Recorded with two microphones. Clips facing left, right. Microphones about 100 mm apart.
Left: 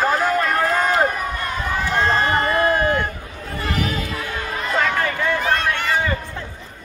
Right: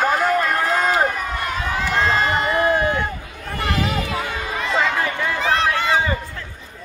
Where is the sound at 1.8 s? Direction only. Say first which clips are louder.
Even; 25° left (ahead or behind).